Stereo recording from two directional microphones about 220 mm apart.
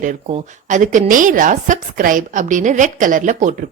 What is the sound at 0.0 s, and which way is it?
A woman's voice, 30° right (ahead or behind).